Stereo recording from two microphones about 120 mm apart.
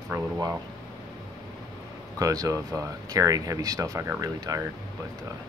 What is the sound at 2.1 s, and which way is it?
Speech, 30° right (ahead or behind).